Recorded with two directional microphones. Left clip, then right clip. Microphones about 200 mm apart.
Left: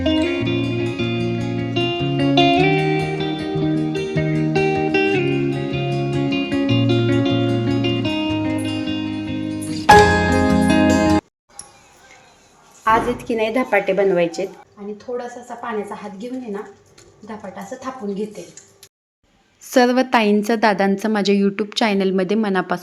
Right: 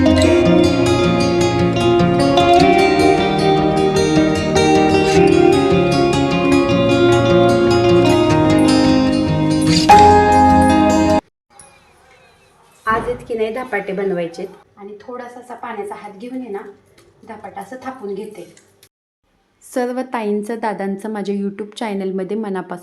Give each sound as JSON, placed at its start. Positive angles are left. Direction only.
{"t": 0.0, "sound": "music", "side_deg": 0}
{"t": 12.8, "sound": "a woman's voice", "side_deg": 30}
{"t": 19.7, "sound": "a woman's voice", "side_deg": 15}